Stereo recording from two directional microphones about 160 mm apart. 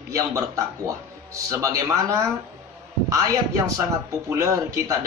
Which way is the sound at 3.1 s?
20° right (ahead or behind).